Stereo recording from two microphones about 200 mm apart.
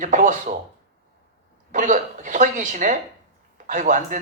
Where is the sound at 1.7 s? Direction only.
40° right (ahead or behind).